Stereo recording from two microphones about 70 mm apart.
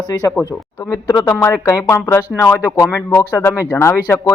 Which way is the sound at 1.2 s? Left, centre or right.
Left.